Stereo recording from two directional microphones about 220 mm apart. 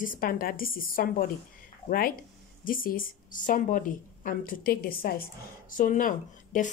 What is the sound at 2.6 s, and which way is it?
A woman's voice, 40° left (ahead or behind).